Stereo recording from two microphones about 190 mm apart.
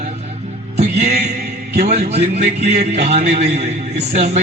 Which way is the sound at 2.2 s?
60° right (ahead or behind).